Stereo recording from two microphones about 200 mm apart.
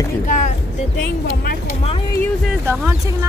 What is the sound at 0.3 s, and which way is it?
Speech, 40° left (ahead or behind).